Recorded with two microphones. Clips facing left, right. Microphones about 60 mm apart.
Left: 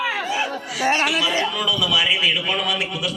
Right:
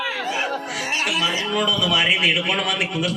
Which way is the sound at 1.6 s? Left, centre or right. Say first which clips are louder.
Right 1 dB; right.